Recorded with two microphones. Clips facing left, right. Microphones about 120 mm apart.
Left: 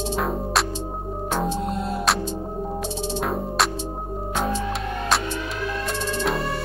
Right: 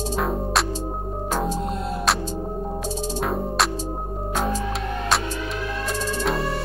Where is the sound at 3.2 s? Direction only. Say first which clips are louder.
Right 1 dB; centre (ahead or behind).